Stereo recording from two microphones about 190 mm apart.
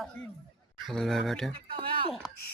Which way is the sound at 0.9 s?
Centre (ahead or behind).